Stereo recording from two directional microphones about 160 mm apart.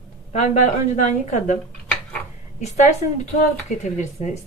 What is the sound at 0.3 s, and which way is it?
A woman's voice, 45° left (ahead or behind).